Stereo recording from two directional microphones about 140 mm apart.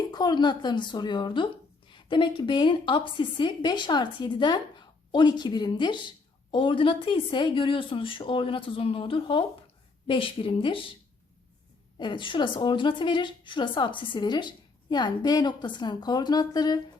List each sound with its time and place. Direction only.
0.1 s speech: 30° left (ahead or behind)
11.9 s speech: 35° left (ahead or behind)